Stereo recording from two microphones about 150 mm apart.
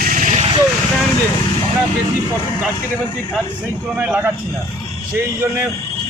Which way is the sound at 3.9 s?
5° right (ahead or behind).